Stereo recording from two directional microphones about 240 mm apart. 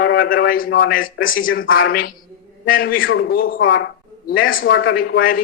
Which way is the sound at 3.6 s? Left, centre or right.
Left.